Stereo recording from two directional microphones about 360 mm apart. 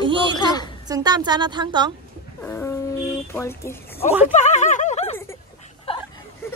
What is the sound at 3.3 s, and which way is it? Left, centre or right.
Speech, centre.